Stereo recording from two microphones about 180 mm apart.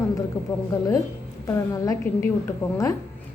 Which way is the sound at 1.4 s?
20° left (ahead or behind).